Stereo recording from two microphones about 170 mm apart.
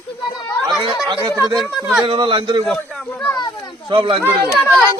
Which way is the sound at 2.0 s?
30° right (ahead or behind).